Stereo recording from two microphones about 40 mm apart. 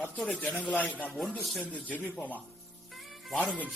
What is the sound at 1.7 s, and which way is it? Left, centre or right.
Speech, left.